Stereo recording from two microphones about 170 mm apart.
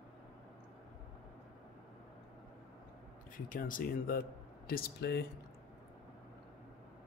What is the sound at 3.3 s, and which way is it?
Speech, 55° left (ahead or behind).